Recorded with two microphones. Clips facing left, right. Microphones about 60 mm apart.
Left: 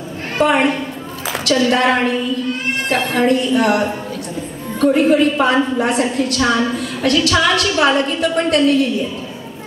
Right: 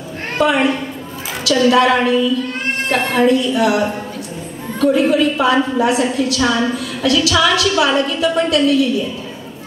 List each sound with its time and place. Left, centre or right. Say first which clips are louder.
0.4 s a woman's voice: even; left
3.2 s a woman's voice: right 1 dB; left